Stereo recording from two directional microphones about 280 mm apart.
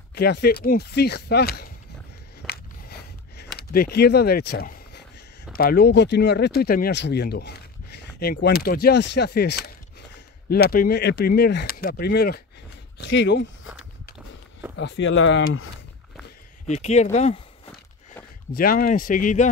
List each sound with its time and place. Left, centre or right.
0.1 s speech: left
2.4 s a sound: left
5.5 s speech: left
14.8 s speech: left
16.6 s speech: left
18.5 s speech: left